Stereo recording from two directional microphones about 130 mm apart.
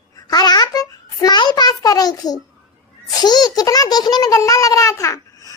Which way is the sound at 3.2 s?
30° left (ahead or behind).